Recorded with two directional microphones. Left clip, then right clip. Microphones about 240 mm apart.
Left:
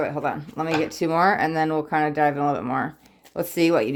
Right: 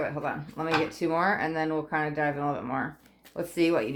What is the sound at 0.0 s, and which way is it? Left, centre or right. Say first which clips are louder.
Speech: left 6 dB; left.